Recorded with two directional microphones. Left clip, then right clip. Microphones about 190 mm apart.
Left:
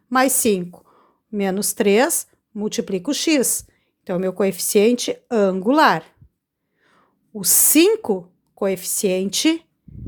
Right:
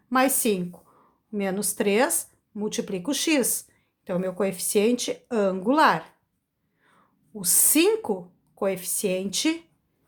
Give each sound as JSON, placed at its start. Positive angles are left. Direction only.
{"t": 0.1, "sound": "a woman's voice", "side_deg": 35}